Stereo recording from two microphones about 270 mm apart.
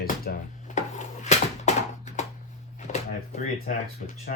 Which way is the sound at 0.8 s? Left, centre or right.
Left.